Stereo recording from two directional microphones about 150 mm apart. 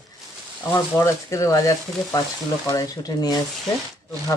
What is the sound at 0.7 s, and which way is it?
Speech, 20° left (ahead or behind).